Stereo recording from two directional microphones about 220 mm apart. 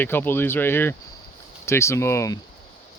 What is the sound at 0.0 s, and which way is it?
Speech, 10° left (ahead or behind).